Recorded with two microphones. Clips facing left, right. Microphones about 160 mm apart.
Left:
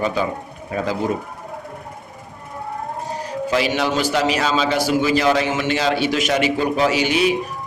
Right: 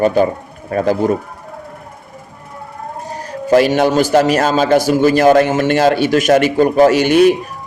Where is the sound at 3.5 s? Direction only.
50° right (ahead or behind).